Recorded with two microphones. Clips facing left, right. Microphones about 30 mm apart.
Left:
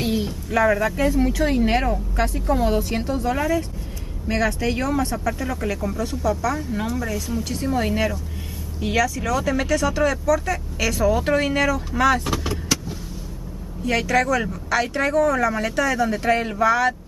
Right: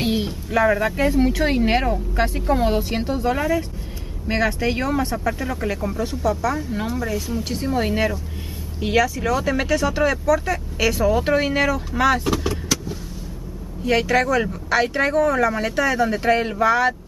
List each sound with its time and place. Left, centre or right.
0.0 s a sound: right
0.5 s speech: centre
12.4 s vehicle: centre
13.8 s speech: centre